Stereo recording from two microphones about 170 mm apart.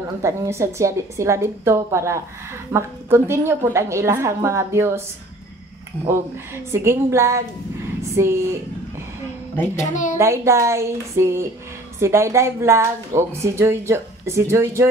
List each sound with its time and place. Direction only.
0.2 s speech: 15° right (ahead or behind)
6.0 s speech: 15° right (ahead or behind)
9.8 s a child's voice: 45° left (ahead or behind)
10.1 s speech: 15° right (ahead or behind)